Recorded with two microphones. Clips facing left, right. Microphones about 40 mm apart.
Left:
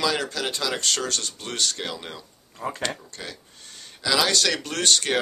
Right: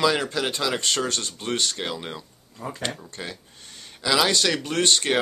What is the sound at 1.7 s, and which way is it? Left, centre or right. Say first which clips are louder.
Speech: right 2 dB; centre.